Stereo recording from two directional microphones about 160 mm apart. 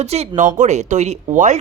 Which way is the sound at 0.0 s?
40° right (ahead or behind).